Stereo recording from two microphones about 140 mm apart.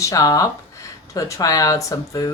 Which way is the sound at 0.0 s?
25° left (ahead or behind).